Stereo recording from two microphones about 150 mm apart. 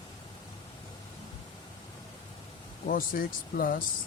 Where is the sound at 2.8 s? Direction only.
70° left (ahead or behind).